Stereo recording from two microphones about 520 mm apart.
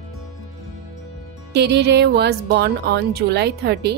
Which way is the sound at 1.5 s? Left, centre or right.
Centre.